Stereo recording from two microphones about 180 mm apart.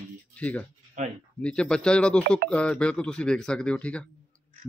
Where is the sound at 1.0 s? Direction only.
45° right (ahead or behind).